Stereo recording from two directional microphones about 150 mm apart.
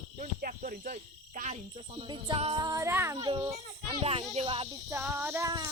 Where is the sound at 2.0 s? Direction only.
30° right (ahead or behind).